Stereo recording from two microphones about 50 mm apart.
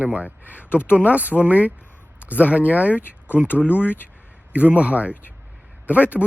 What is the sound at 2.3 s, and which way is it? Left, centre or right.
Speech, left.